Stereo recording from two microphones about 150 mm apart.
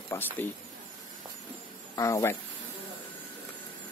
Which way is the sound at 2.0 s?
20° left (ahead or behind).